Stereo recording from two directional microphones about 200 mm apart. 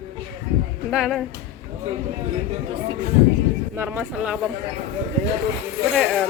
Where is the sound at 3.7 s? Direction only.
10° right (ahead or behind).